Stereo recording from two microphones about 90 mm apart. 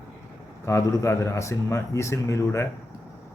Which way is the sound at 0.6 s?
35° left (ahead or behind).